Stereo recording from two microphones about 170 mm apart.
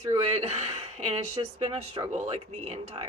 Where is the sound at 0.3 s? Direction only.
40° right (ahead or behind).